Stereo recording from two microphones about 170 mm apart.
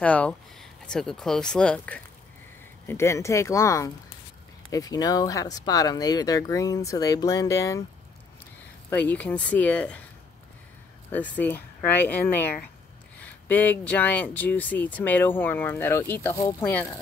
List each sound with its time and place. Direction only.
0.0 s speech: 10° left (ahead or behind)
2.9 s speech: 15° left (ahead or behind)
8.9 s speech: 10° left (ahead or behind)
11.1 s speech: 10° left (ahead or behind)